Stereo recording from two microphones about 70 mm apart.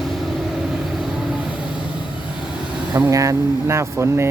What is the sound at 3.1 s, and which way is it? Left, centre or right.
Speech, right.